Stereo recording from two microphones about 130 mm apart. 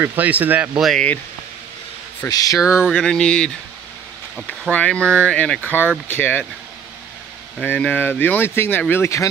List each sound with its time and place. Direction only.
0.0 s speech: 15° right (ahead or behind)
2.2 s speech: 30° left (ahead or behind)
2.6 s a sound: 5° right (ahead or behind)
2.9 s speech: 5° left (ahead or behind)
7.6 s speech: 15° left (ahead or behind)